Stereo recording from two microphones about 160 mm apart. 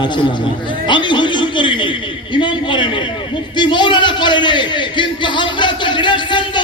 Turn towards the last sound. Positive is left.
turn(degrees=30)  # may be behind; listen again after turning